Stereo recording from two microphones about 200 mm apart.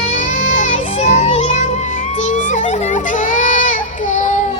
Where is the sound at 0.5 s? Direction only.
40° left (ahead or behind).